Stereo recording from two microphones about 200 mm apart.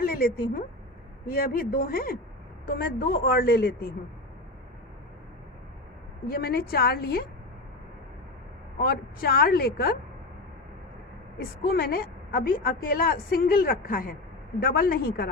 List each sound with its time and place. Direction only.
0.0 s a woman's voice: 50° left (ahead or behind)
6.2 s a woman's voice: 45° left (ahead or behind)
8.8 s a woman's voice: 50° left (ahead or behind)
11.6 s a woman's voice: 50° left (ahead or behind)